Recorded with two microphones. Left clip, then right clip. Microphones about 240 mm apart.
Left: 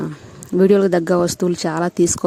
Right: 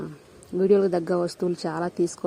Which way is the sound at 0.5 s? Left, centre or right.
Left.